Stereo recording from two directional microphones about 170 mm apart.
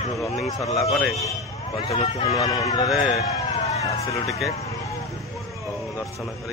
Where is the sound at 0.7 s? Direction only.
Centre (ahead or behind).